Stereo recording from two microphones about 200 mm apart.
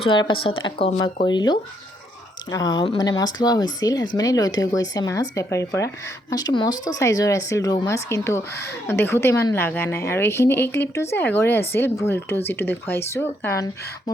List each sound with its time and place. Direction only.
0.0 s a woman's voice: 25° left (ahead or behind)